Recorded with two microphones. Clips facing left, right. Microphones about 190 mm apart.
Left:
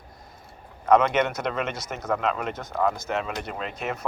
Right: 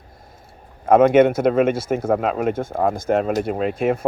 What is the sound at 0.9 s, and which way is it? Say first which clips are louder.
Speech: right 8 dB; 50° right (ahead or behind).